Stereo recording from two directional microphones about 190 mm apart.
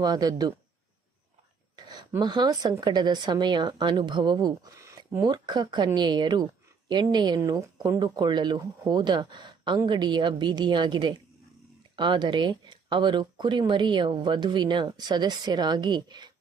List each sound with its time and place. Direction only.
0.0 s a woman's voice: 20° right (ahead or behind)
1.8 s a woman's voice: 20° right (ahead or behind)